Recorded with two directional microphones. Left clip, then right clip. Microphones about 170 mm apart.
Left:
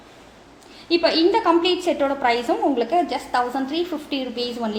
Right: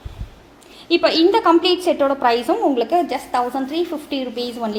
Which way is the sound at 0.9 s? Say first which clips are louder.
Right 3 dB; 30° right (ahead or behind).